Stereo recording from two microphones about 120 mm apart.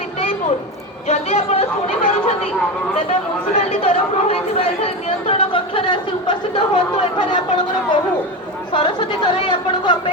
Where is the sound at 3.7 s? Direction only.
55° left (ahead or behind).